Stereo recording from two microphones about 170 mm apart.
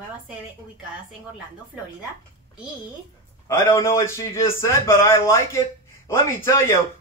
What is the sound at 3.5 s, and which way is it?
A man's voice, 15° left (ahead or behind).